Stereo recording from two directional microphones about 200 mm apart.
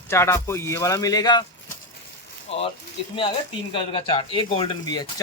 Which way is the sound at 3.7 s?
25° left (ahead or behind).